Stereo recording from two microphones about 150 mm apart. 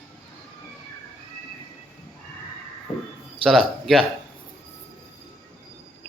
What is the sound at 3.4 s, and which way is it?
Speech, centre (ahead or behind).